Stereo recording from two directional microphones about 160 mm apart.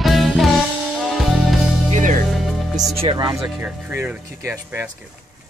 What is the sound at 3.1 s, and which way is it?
Speech, 25° right (ahead or behind).